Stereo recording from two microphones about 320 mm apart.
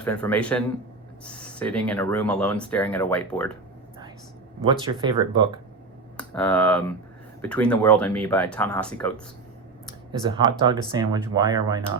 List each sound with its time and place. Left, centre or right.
0.0 s speech: centre
4.9 s speech: centre
6.1 s speech: centre
10.1 s speech: centre